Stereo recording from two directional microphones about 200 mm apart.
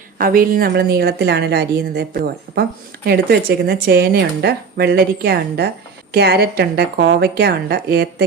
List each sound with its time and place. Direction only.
0.2 s speech: 45° right (ahead or behind)